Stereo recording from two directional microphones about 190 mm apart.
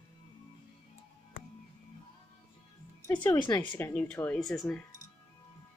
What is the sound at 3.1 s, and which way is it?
Speech, 20° left (ahead or behind).